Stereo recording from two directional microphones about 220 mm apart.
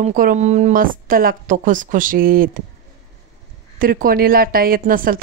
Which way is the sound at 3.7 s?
40° right (ahead or behind).